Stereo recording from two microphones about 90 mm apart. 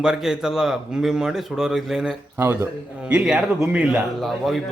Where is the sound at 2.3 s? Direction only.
30° right (ahead or behind).